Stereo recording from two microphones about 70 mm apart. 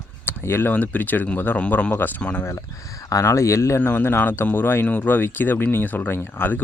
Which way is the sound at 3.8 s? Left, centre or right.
Left.